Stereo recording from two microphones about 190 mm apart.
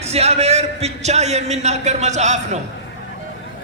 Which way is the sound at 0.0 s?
35° right (ahead or behind).